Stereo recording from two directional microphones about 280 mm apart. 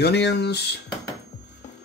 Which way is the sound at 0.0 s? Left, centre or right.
Left.